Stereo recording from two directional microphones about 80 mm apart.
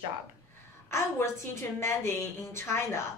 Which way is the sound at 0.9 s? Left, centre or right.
Left.